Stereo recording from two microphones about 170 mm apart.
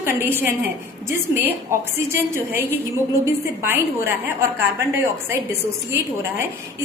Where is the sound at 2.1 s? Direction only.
15° right (ahead or behind).